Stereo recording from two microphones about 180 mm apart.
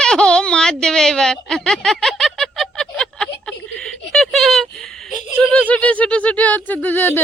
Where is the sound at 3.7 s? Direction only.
5° left (ahead or behind).